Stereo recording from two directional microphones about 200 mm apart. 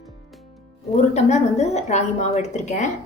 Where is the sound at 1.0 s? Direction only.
35° left (ahead or behind).